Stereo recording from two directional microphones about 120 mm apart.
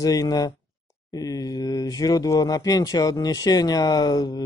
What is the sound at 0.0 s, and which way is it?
Speech, 30° left (ahead or behind).